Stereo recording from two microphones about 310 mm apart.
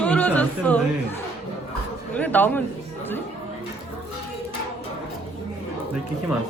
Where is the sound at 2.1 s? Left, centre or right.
Centre.